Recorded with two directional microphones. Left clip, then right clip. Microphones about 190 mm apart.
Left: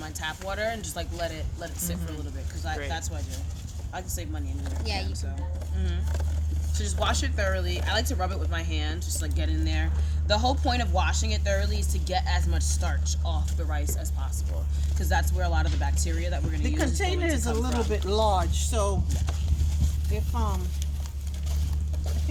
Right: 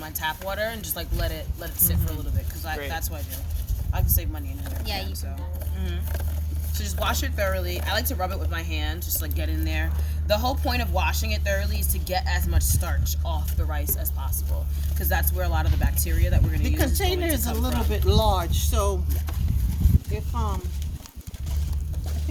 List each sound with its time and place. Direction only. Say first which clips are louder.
0.0 s speech: right 4 dB; 15° right (ahead or behind)
3.9 s speech: right 2 dB; 15° right (ahead or behind)
16.6 s speech: right 2 dB; 40° right (ahead or behind)
17.7 s speech: even; 5° right (ahead or behind)
17.9 s speech: right 1 dB; 30° right (ahead or behind)
20.1 s speech: left 1 dB; 20° right (ahead or behind)